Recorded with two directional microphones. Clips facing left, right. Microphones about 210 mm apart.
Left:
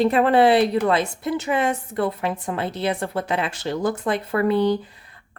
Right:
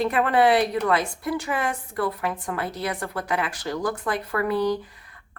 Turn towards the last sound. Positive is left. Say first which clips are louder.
# left 4 dB
turn(degrees=25)  # may be behind; listen again after turning